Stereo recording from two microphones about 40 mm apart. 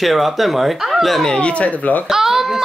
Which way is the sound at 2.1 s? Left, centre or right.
Centre.